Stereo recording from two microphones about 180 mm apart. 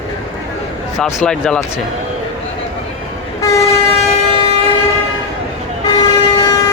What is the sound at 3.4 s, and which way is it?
Train, 15° left (ahead or behind).